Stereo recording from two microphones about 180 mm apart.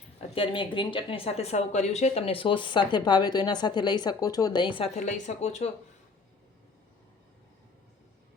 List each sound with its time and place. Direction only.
0.2 s speech: 30° left (ahead or behind)
4.9 s speech: 40° left (ahead or behind)